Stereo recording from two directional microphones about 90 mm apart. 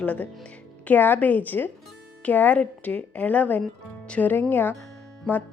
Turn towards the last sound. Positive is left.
turn(degrees=15)  # may be behind; listen again after turning